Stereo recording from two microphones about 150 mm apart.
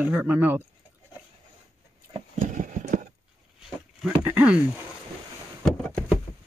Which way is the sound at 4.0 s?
10° right (ahead or behind).